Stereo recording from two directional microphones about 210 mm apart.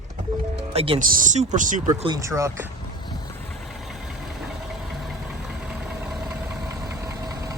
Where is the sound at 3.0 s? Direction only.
20° left (ahead or behind).